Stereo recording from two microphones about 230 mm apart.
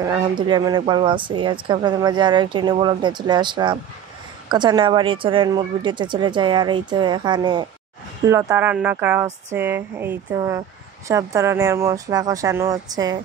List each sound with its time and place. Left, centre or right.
0.1 s speech: centre